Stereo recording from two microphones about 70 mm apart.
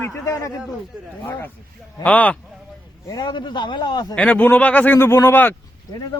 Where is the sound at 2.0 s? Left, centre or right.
Left.